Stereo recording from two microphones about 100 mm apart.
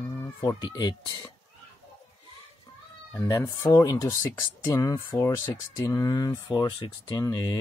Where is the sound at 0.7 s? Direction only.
45° left (ahead or behind).